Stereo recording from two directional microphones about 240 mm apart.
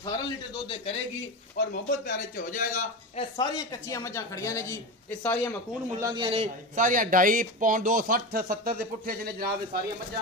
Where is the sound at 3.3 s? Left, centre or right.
Centre.